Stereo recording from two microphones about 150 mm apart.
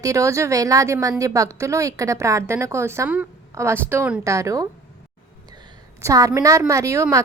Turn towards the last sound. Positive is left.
turn(degrees=-20)  # may be behind; listen again after turning